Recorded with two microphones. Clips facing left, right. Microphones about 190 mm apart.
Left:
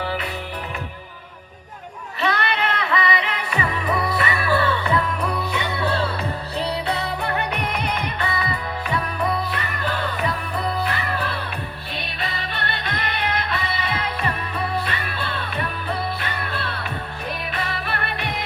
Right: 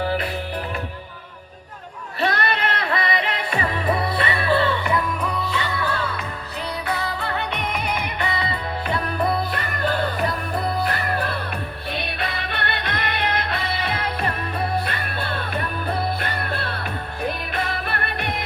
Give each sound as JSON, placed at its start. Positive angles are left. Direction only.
{"t": 0.0, "sound": "music", "side_deg": -40}
{"t": 2.2, "sound": "music", "side_deg": -45}
{"t": 5.5, "sound": "music", "side_deg": 20}
{"t": 8.2, "sound": "music", "side_deg": -25}
{"t": 9.5, "sound": "music", "side_deg": -45}